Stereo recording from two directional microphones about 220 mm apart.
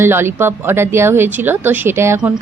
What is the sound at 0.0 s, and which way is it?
Speech, 10° right (ahead or behind).